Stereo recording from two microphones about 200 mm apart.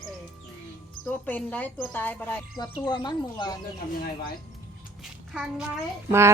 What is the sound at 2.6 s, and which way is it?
Speech, 20° left (ahead or behind).